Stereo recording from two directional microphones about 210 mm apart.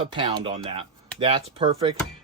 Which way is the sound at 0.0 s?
25° right (ahead or behind).